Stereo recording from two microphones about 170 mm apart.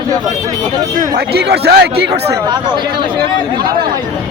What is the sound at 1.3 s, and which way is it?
Speech, 70° right (ahead or behind).